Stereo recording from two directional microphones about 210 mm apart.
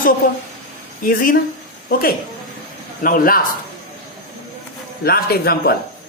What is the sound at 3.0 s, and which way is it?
Speech, 40° left (ahead or behind).